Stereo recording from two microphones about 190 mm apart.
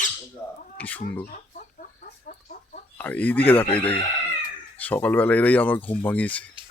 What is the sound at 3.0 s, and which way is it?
Speech, 10° left (ahead or behind).